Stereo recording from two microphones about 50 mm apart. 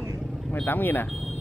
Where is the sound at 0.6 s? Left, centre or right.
Left.